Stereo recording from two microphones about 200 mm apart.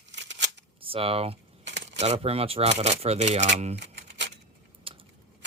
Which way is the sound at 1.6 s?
60° right (ahead or behind).